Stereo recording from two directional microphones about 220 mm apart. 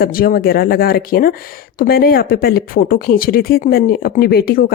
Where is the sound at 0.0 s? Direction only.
40° left (ahead or behind).